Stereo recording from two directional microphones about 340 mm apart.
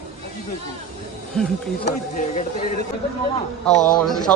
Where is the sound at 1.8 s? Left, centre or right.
Left.